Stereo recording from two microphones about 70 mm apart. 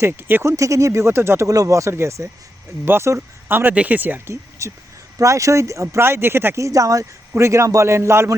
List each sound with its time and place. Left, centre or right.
0.0 s speech: right
0.4 s a man's voice: right
1.5 s a man's voice: right
2.8 s speech: right
4.3 s a man's voice: right
6.7 s a man's voice: right